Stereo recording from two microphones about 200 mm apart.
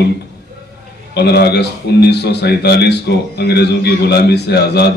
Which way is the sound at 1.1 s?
55° left (ahead or behind).